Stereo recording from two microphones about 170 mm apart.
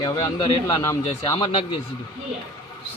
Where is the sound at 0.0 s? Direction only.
30° left (ahead or behind).